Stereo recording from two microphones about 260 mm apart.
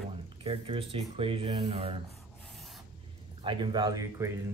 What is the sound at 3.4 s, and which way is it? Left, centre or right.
Speech, centre.